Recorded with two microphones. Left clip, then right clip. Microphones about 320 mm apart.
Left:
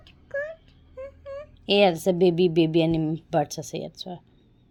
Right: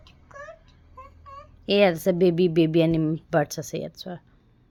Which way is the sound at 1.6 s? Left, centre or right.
Centre.